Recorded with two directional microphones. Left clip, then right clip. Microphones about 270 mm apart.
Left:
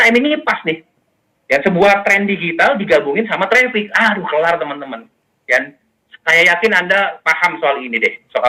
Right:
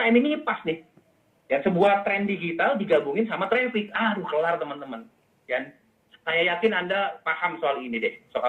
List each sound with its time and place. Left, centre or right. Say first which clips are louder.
0.0 s a man's voice: left 10 dB; left